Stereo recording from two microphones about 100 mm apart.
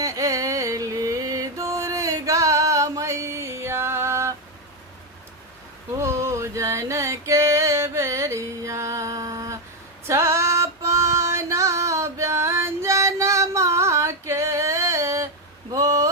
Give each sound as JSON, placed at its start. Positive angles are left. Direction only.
{"t": 0.0, "sound": "music", "side_deg": -35}
{"t": 6.0, "sound": "music", "side_deg": -30}
{"t": 10.1, "sound": "female singing", "side_deg": -30}
{"t": 15.7, "sound": "a sound", "side_deg": -35}